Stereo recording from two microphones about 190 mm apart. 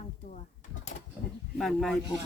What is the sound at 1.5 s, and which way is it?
Speech, centre (ahead or behind).